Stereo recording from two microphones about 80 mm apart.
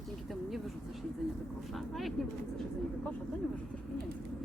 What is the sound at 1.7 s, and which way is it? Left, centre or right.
Speech, centre.